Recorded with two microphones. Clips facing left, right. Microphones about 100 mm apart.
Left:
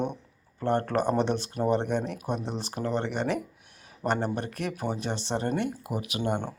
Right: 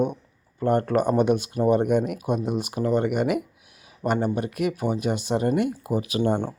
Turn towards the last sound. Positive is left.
turn(degrees=-15)  # may be behind; listen again after turning